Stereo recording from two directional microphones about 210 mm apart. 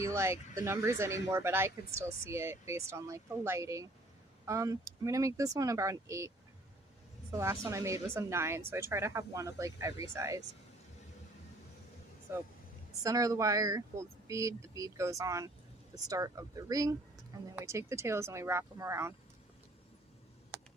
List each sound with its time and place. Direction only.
0.0 s speech: 15° right (ahead or behind)
7.3 s speech: 15° right (ahead or behind)
12.3 s speech: 10° right (ahead or behind)
20.5 s a sound: 10° right (ahead or behind)